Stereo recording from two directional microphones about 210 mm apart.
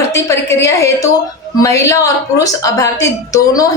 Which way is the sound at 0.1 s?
15° left (ahead or behind).